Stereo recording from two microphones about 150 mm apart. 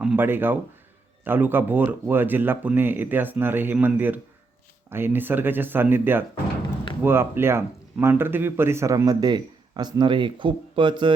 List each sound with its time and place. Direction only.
0.0 s speech: 10° right (ahead or behind); by 11.1 s 30° right (ahead or behind)